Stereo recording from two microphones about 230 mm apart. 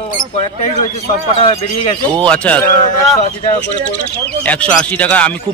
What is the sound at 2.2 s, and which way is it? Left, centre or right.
Speech, centre.